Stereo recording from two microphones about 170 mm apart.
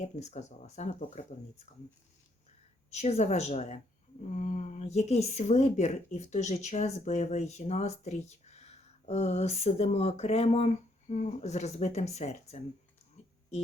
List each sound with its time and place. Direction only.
0.0 s speech: 45° left (ahead or behind)
2.9 s speech: 40° left (ahead or behind)